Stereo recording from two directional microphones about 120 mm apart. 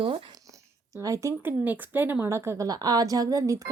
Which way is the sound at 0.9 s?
25° right (ahead or behind).